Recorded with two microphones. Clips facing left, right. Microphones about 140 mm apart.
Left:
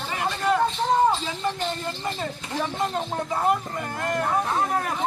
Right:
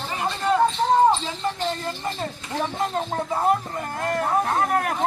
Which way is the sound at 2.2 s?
Centre (ahead or behind).